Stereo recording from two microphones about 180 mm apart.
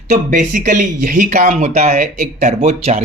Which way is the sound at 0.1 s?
45° right (ahead or behind).